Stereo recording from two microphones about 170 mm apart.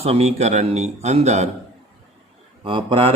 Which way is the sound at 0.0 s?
40° right (ahead or behind).